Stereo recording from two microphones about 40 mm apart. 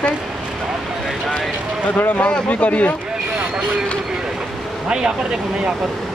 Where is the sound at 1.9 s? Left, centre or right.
Left.